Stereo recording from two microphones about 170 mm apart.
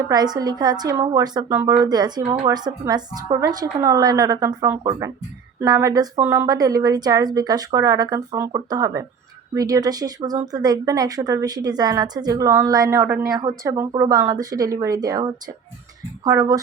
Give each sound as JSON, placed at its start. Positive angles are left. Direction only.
{"t": 0.1, "sound": "speech", "side_deg": -25}